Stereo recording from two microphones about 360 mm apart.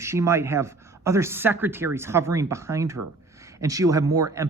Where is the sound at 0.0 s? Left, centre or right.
Centre.